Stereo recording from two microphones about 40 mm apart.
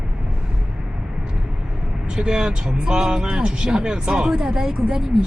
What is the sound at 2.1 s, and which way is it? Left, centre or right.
Speech, centre.